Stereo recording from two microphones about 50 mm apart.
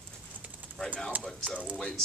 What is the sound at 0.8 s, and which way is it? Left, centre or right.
Speech, centre.